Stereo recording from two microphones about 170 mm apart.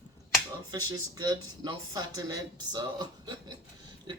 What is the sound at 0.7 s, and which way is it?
Speech, 20° right (ahead or behind).